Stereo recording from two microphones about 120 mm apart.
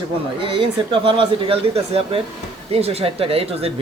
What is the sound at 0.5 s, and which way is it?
Speech, 45° right (ahead or behind).